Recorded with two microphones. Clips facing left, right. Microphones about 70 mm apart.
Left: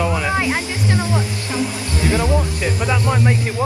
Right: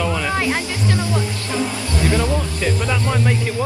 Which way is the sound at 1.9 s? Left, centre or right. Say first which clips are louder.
Left 1 dB; left.